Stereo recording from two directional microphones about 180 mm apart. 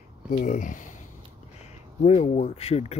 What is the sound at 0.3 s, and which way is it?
Speech, 50° left (ahead or behind).